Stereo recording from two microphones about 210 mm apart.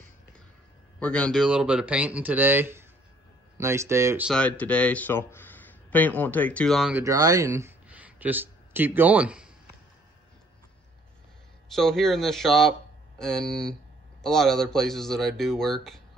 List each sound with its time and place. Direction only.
0.9 s speech: 5° left (ahead or behind); by 4.3 s 10° right (ahead or behind)
4.3 s speech: 5° left (ahead or behind)
11.7 s speech: centre (ahead or behind)